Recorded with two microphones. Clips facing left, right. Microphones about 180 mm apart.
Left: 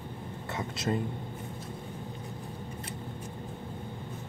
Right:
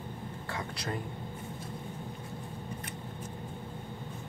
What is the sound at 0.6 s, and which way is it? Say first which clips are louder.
Speech: left 6 dB; 20° left (ahead or behind).